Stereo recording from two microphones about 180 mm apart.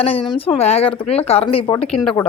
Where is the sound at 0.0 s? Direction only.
30° left (ahead or behind).